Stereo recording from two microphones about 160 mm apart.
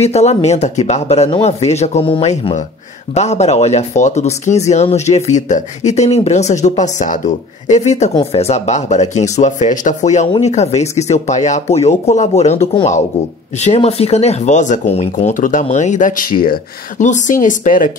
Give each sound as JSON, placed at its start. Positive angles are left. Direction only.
{"t": 0.0, "sound": "speech", "side_deg": 40}
{"t": 17.0, "sound": "speech", "side_deg": 50}